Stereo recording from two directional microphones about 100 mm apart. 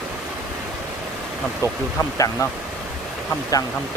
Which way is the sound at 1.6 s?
30° left (ahead or behind).